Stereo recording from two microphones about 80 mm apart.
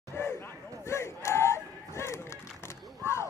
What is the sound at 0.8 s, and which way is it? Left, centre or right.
Battle cry, left.